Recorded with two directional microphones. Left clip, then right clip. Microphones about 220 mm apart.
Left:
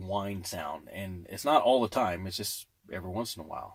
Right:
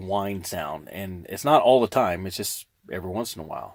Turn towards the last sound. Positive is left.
turn(degrees=-35)  # may be behind; listen again after turning